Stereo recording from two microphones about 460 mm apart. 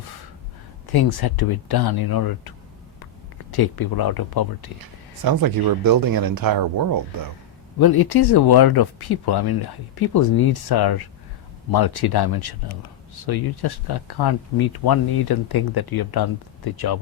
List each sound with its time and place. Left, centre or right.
0.9 s speech: left
3.5 s speech: left
4.8 s speech: right
7.8 s speech: left